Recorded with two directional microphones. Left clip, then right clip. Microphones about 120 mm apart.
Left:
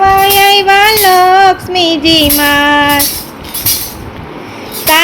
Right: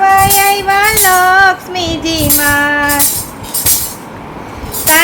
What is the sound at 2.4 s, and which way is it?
Music, 55° left (ahead or behind).